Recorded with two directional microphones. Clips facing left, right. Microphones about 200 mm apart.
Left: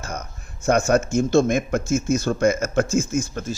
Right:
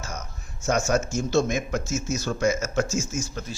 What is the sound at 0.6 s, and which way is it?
Speech, 55° left (ahead or behind).